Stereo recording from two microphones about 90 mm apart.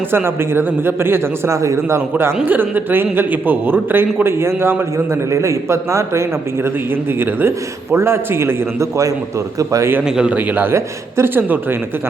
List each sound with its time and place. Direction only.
0.1 s a man's voice: 25° right (ahead or behind)
7.9 s a man's voice: 30° right (ahead or behind)
10.2 s a man's voice: 15° right (ahead or behind)